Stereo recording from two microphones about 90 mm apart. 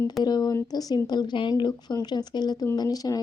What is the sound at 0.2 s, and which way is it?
Speech, 50° left (ahead or behind).